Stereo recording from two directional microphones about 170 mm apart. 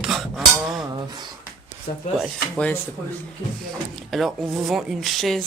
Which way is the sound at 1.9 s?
60° left (ahead or behind).